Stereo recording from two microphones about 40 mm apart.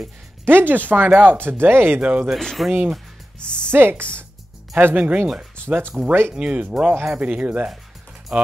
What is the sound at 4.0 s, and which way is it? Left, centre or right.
Speech, right.